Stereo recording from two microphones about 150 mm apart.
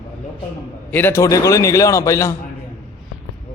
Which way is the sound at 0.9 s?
15° left (ahead or behind).